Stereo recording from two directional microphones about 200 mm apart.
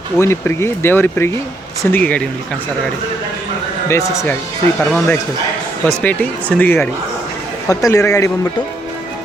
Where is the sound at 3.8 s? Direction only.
15° left (ahead or behind).